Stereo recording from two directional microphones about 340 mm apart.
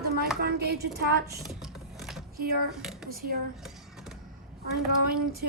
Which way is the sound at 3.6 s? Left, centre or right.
Centre.